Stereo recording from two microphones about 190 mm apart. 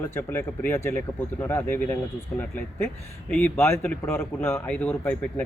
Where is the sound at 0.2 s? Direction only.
10° left (ahead or behind).